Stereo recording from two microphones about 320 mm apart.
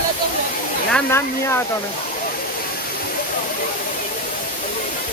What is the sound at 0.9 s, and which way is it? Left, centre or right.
Speech, centre.